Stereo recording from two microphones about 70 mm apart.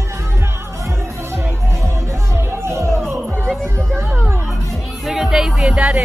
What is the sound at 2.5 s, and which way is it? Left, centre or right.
Music, right.